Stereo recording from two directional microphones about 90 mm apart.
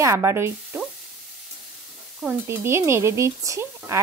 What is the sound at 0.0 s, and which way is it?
Speech, 30° right (ahead or behind).